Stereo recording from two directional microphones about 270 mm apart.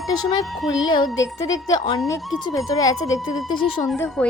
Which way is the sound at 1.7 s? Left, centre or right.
Centre.